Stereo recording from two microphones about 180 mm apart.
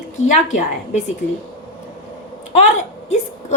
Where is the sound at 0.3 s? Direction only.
45° left (ahead or behind).